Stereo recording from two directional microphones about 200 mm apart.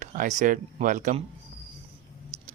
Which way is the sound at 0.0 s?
35° right (ahead or behind).